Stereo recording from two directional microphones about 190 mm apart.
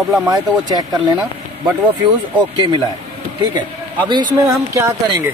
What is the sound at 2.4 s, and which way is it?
A man's voice, 25° right (ahead or behind).